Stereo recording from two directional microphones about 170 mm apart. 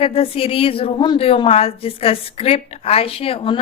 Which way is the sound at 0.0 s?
35° left (ahead or behind).